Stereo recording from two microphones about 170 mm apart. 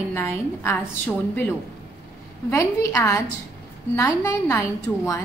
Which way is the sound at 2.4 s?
15° left (ahead or behind).